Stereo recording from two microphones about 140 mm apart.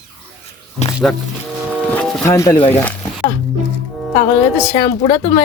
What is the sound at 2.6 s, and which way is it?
Speech, 45° left (ahead or behind).